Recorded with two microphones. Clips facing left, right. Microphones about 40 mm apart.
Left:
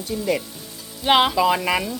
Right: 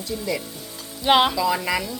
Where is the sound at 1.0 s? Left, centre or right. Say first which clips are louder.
Even; centre.